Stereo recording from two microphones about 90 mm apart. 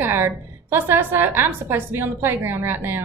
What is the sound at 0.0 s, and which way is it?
Speech, 25° right (ahead or behind).